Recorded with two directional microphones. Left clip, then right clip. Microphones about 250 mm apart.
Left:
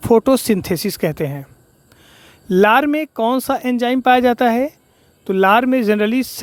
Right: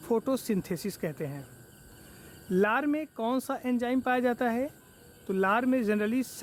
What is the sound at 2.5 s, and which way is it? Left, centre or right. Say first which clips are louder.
Speech: left 14 dB; left.